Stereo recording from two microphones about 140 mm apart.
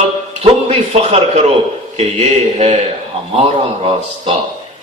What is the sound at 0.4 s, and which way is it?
A man's voice, 45° right (ahead or behind).